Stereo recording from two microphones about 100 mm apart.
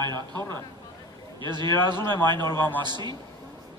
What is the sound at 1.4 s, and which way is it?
A man's voice, 50° right (ahead or behind).